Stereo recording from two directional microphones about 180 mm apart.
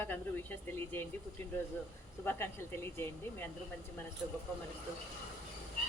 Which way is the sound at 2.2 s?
10° left (ahead or behind).